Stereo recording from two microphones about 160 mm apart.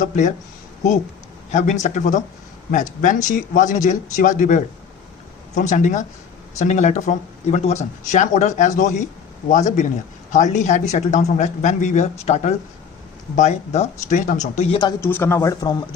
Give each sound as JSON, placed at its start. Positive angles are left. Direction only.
{"t": 0.0, "sound": "speech", "side_deg": 50}
{"t": 1.5, "sound": "speech", "side_deg": 50}
{"t": 15.0, "sound": "speech", "side_deg": 15}